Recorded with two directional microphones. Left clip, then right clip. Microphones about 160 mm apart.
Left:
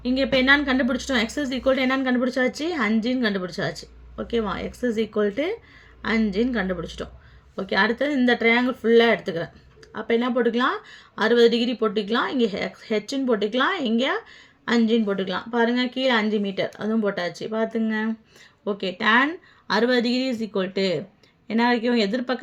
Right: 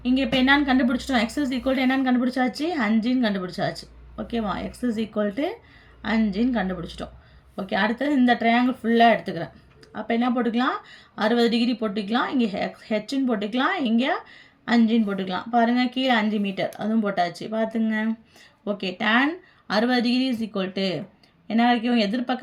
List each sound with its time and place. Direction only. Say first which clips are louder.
0.0 s a woman's voice: left 1 dB; 25° left (ahead or behind)